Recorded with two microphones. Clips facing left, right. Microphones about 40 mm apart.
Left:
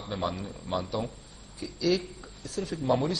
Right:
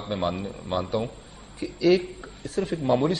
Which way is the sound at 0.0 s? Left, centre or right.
Right.